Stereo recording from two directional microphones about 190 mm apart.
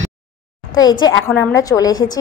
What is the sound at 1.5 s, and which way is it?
Speech, 20° left (ahead or behind).